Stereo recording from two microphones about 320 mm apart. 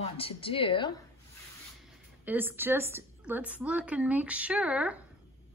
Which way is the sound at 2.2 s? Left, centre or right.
Centre.